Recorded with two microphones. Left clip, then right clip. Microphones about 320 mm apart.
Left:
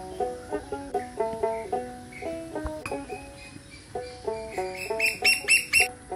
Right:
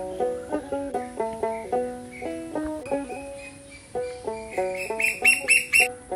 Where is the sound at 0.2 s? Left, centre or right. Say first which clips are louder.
Right 3 dB; right.